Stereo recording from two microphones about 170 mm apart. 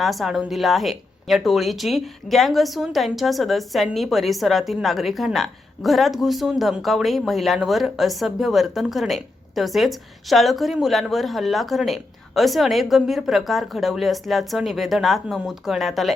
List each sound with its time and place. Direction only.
0.0 s speech: centre (ahead or behind)